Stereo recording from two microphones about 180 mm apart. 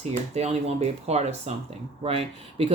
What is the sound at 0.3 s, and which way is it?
Speech, 35° right (ahead or behind).